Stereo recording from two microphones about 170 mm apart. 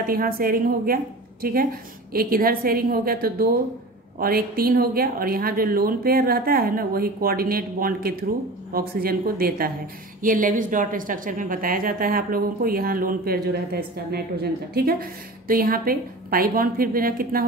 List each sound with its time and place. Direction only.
0.0 s a woman's voice: 60° right (ahead or behind)